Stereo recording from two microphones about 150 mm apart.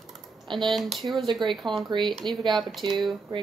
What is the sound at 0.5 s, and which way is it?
Speech, centre (ahead or behind).